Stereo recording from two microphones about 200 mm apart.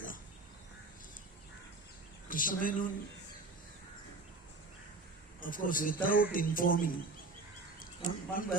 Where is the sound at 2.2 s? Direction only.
45° left (ahead or behind).